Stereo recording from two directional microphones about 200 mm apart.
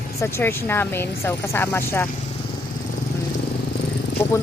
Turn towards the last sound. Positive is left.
turn(degrees=10)  # may be behind; listen again after turning